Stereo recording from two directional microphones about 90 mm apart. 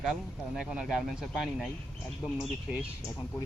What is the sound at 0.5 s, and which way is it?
Speech, 5° right (ahead or behind).